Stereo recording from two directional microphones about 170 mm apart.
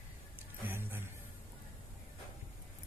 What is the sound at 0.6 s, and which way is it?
Music, 10° right (ahead or behind).